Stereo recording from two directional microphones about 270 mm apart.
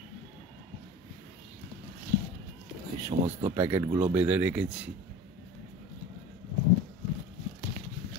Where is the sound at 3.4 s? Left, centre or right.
Centre.